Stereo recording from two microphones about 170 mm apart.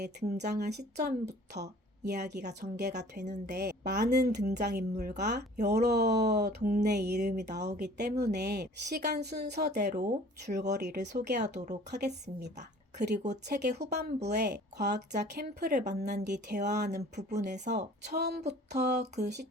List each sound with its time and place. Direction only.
0.0 s speech: 75° right (ahead or behind)